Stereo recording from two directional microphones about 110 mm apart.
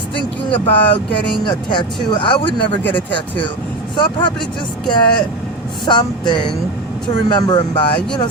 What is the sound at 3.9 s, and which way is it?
Speech, 50° left (ahead or behind).